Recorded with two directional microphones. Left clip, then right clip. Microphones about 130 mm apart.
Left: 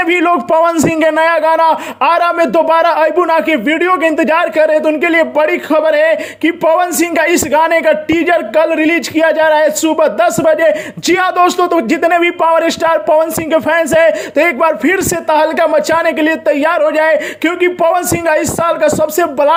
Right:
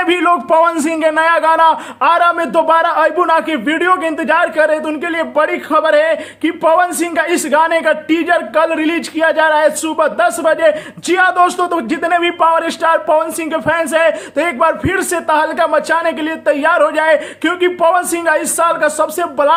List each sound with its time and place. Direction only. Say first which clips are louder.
0.0 s a man's voice: left 1 dB; 35° left (ahead or behind)